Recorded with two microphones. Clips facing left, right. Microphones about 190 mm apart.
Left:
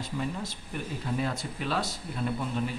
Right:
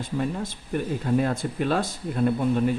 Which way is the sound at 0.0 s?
50° right (ahead or behind).